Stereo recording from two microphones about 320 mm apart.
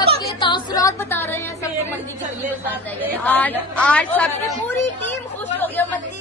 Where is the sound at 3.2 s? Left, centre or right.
Centre.